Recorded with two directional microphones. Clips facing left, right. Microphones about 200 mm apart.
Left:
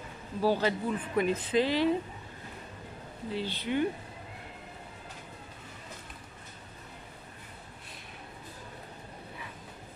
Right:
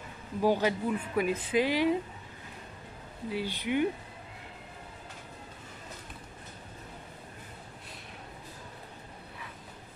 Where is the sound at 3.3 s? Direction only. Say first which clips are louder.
Right 1 dB; 15° right (ahead or behind).